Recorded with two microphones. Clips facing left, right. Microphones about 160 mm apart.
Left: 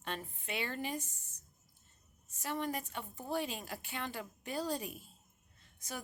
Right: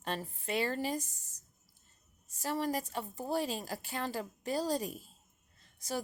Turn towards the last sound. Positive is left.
turn(degrees=-35)  # may be behind; listen again after turning